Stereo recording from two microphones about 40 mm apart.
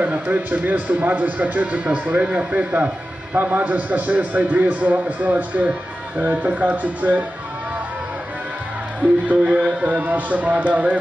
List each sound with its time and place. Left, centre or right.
0.0 s a man's voice: right
9.4 s a man's voice: right